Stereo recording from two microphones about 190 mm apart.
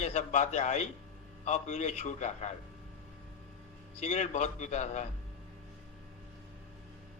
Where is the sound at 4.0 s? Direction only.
35° left (ahead or behind).